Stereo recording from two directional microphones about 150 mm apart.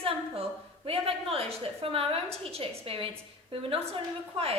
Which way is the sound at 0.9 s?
40° right (ahead or behind).